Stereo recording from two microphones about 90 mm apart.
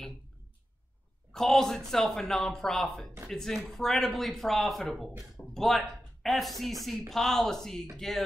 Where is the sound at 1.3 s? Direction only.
5° left (ahead or behind).